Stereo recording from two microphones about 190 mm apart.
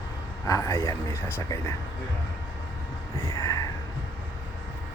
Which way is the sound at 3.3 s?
15° left (ahead or behind).